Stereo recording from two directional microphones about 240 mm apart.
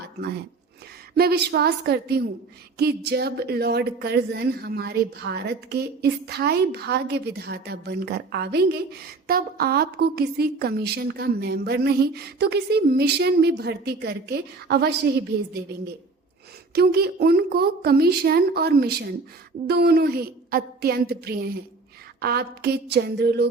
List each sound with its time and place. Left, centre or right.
1.1 s a woman's voice: right
16.7 s a woman's voice: right